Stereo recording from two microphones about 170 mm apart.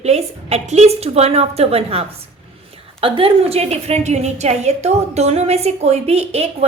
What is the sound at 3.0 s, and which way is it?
A woman's voice, 30° right (ahead or behind).